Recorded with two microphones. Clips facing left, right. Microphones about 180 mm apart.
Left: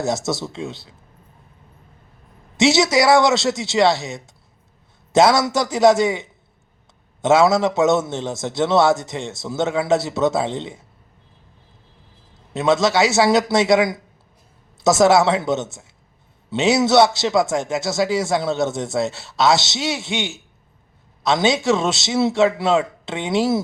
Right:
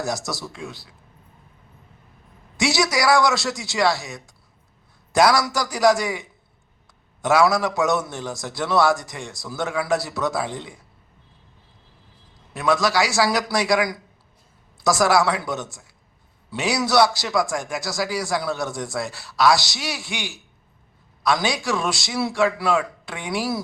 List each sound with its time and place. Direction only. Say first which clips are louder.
0.0 s a man's voice: left 5 dB; 25° left (ahead or behind)
2.6 s a man's voice: left 6 dB; 25° left (ahead or behind)
12.5 s a man's voice: left 4 dB; 25° left (ahead or behind)